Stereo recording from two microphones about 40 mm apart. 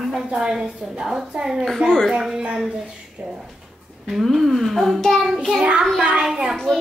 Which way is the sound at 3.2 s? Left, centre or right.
Right.